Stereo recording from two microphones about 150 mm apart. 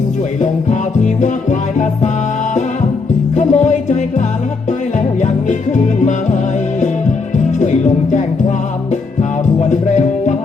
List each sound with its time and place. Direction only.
0.7 s music: 50° left (ahead or behind)
3.3 s music: 50° left (ahead or behind)
5.2 s music: 50° left (ahead or behind)
7.3 s music: 50° left (ahead or behind)